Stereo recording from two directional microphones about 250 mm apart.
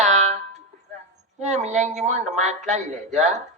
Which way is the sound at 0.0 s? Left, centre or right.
Right.